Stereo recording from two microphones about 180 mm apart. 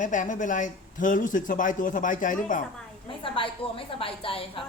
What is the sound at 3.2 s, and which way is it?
A woman's voice, 30° left (ahead or behind).